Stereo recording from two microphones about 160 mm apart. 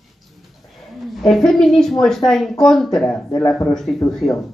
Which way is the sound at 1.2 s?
Centre (ahead or behind).